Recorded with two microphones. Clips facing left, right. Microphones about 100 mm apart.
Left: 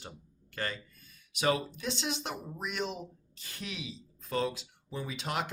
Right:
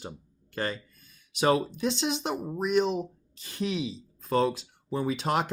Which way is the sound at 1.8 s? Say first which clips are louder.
Right 7 dB; 20° right (ahead or behind).